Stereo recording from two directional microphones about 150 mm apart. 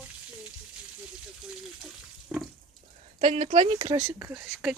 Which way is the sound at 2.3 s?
Centre (ahead or behind).